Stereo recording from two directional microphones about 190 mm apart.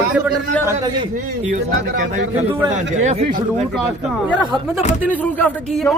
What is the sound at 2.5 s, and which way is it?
Speech, 15° right (ahead or behind).